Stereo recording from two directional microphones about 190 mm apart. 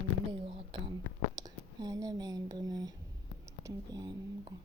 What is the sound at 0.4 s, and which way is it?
Whispering, 30° right (ahead or behind).